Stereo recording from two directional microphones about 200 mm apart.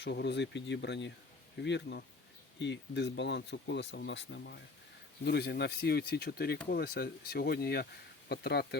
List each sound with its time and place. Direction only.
0.0 s speech: 55° left (ahead or behind)